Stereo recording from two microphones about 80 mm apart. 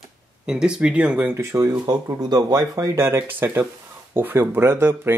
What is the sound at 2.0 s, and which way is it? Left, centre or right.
Speech, right.